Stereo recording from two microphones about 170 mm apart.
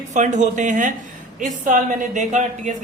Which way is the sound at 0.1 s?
45° right (ahead or behind).